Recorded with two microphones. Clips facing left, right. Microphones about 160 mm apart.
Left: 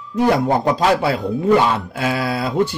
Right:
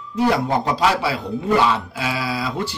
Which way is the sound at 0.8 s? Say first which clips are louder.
Left 3 dB; 45° left (ahead or behind).